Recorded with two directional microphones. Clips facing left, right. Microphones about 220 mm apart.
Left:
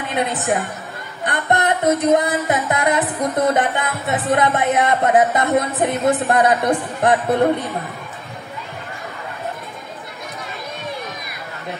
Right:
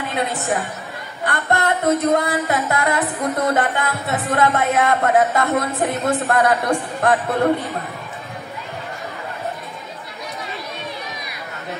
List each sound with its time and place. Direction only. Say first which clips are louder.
1.2 s music: left 1 dB; 20° left (ahead or behind)